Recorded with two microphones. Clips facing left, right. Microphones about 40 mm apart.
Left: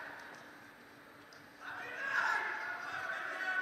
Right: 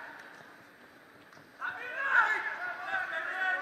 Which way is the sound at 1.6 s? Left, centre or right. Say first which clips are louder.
Right 7 dB; right.